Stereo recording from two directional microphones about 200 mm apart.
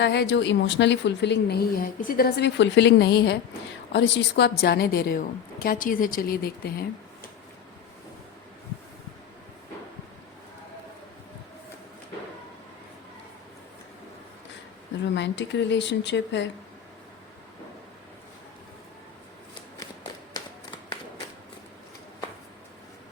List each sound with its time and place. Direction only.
0.0 s a woman's voice: 55° left (ahead or behind)
15.0 s a woman's voice: 60° left (ahead or behind)